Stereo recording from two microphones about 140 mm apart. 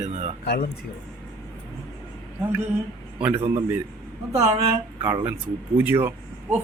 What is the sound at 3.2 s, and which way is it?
A man's voice, 15° right (ahead or behind).